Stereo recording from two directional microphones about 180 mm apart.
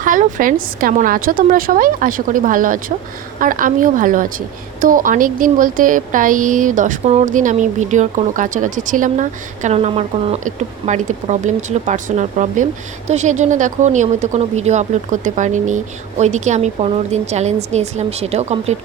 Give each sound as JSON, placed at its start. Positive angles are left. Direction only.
{"t": 0.0, "sound": "a woman's voice", "side_deg": -50}